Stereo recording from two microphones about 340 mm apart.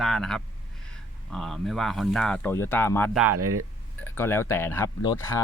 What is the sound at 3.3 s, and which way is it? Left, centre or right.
Speech, right.